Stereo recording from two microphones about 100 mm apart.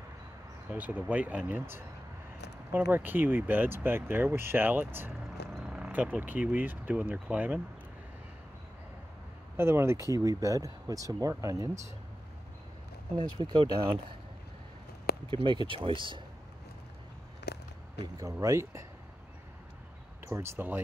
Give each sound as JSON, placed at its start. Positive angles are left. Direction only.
{"t": 0.7, "sound": "speech", "side_deg": -15}
{"t": 2.9, "sound": "speech", "side_deg": -20}
{"t": 5.6, "sound": "speech", "side_deg": -5}
{"t": 9.6, "sound": "speech", "side_deg": -25}
{"t": 13.2, "sound": "speech", "side_deg": -50}
{"t": 15.2, "sound": "speech", "side_deg": -55}
{"t": 18.0, "sound": "speech", "side_deg": -35}
{"t": 20.2, "sound": "speech", "side_deg": -25}